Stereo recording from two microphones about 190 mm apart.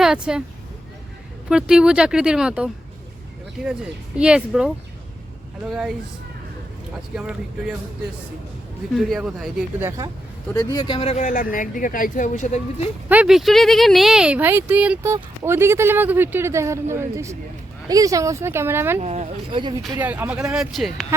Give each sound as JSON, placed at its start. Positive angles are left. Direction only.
{"t": 0.0, "sound": "speech", "side_deg": -5}
{"t": 1.5, "sound": "speech", "side_deg": -5}
{"t": 4.2, "sound": "speech", "side_deg": -5}
{"t": 9.0, "sound": "speech", "side_deg": 0}
{"t": 10.5, "sound": "speech", "side_deg": 20}
{"t": 13.1, "sound": "speech", "side_deg": -5}
{"t": 18.9, "sound": "speech", "side_deg": -35}
{"t": 20.0, "sound": "speech", "side_deg": -10}